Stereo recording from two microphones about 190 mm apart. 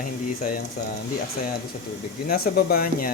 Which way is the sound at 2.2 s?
50° left (ahead or behind).